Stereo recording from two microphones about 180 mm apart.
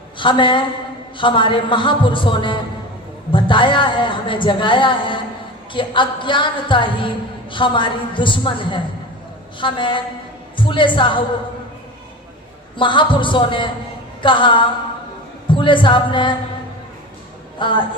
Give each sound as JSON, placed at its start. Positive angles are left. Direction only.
{"t": 0.2, "sound": "a man's voice", "side_deg": 25}
{"t": 12.7, "sound": "a man's voice", "side_deg": 25}
{"t": 17.6, "sound": "a man's voice", "side_deg": 25}